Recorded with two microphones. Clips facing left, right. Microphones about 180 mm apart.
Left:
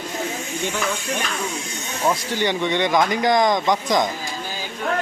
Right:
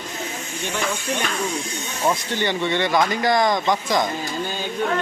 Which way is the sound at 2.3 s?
15° left (ahead or behind).